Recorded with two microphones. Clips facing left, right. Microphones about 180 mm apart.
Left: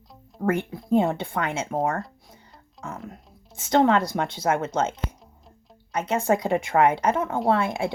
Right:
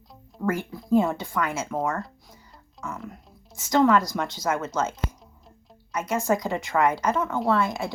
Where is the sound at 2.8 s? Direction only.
35° left (ahead or behind).